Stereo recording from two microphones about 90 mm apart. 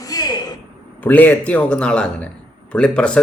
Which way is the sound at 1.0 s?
20° left (ahead or behind).